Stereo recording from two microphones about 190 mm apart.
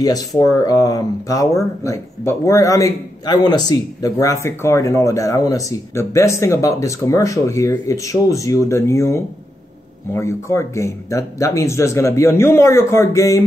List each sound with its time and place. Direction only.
0.4 s speech: 20° left (ahead or behind)